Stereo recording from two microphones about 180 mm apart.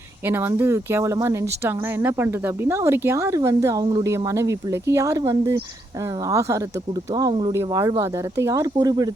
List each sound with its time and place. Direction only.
0.3 s speech: 10° right (ahead or behind)